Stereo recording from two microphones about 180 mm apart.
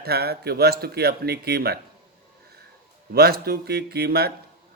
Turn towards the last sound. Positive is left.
turn(degrees=-60)  # may be behind; listen again after turning